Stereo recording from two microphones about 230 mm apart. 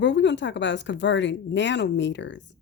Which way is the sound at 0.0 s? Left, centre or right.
Left.